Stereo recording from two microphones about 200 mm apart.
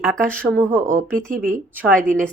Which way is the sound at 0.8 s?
40° right (ahead or behind).